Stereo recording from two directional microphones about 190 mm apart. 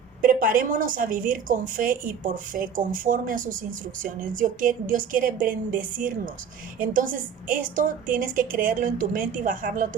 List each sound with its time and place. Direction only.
0.2 s a woman's voice: 45° right (ahead or behind)